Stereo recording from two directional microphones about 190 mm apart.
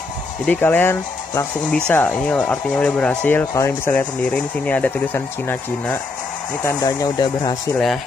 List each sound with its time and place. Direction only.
0.5 s speech: 10° left (ahead or behind)